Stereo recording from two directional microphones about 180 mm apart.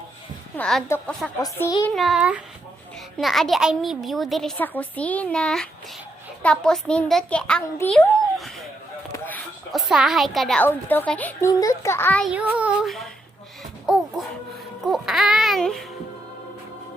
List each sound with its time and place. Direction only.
0.5 s a child's voice: 5° left (ahead or behind)
2.0 s a child's voice: centre (ahead or behind)
9.1 s a sound: 10° left (ahead or behind)
9.7 s a woman's voice: centre (ahead or behind)
12.2 s a child's voice: 5° right (ahead or behind)
13.8 s a sound: centre (ahead or behind)
14.8 s a child's voice: centre (ahead or behind)